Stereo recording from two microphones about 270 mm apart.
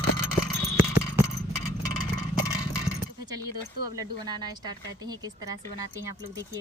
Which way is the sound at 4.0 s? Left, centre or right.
Centre.